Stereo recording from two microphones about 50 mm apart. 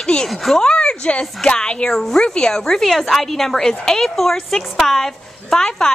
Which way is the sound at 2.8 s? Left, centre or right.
Centre.